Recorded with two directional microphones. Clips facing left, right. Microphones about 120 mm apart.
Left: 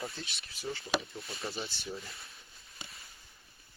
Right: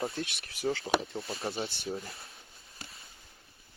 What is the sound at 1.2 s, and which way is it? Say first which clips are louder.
Speech: right 5 dB; 25° right (ahead or behind).